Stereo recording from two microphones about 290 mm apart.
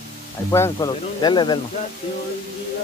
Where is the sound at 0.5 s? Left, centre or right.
Centre.